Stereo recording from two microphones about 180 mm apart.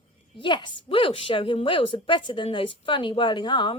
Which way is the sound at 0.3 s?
25° left (ahead or behind).